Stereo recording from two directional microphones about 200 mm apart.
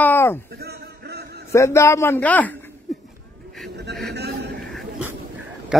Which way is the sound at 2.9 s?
Centre (ahead or behind).